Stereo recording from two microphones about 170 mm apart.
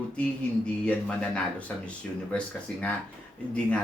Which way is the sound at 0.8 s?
5° left (ahead or behind).